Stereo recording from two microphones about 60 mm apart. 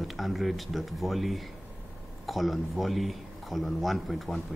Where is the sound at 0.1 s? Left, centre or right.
Centre.